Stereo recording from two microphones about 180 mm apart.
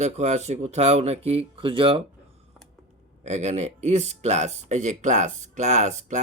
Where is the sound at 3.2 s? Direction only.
40° right (ahead or behind).